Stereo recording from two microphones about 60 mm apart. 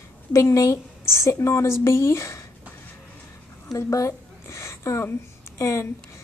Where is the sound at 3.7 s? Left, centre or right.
Left.